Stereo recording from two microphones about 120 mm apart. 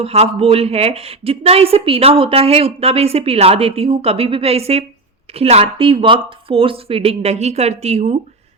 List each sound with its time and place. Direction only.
0.0 s a woman's voice: 60° right (ahead or behind)